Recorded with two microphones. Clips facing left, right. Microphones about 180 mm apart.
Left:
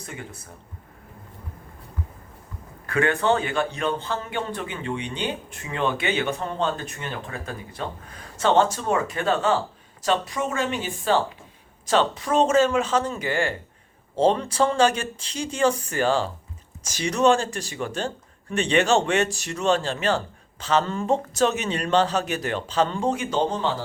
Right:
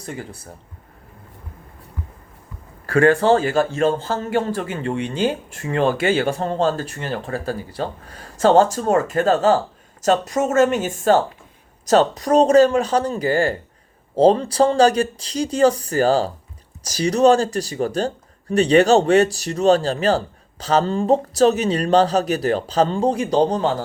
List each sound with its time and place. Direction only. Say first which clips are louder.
0.0 s a man's voice: right 6 dB; 35° right (ahead or behind)
2.8 s a man's voice: right 7 dB; 35° right (ahead or behind)